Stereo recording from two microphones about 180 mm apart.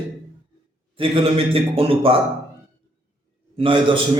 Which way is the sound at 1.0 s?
30° right (ahead or behind).